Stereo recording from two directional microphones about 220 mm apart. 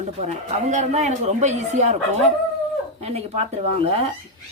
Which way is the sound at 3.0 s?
30° right (ahead or behind).